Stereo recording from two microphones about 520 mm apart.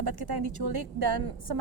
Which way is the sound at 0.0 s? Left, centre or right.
Right.